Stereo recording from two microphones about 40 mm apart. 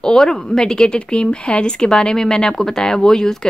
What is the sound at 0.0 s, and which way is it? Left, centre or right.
Speech, centre.